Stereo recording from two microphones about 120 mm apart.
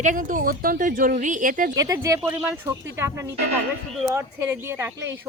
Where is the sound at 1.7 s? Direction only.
30° right (ahead or behind).